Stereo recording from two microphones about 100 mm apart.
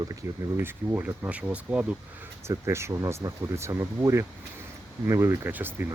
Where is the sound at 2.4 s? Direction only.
25° right (ahead or behind).